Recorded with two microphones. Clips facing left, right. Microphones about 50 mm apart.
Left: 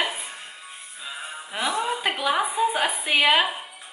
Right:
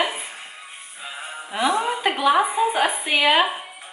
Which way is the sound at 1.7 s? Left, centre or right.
Centre.